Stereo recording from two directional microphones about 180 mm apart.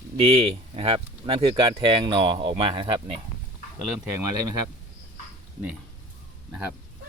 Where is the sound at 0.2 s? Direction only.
35° right (ahead or behind).